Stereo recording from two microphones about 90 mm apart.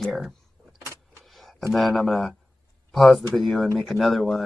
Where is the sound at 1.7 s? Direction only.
Centre (ahead or behind).